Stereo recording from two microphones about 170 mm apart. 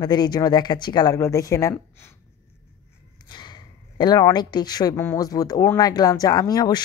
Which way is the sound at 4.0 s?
25° left (ahead or behind).